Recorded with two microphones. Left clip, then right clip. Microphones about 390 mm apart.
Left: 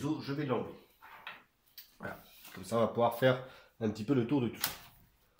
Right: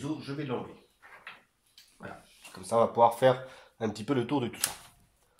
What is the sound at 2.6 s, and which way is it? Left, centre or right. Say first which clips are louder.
Speech: right 7 dB; centre.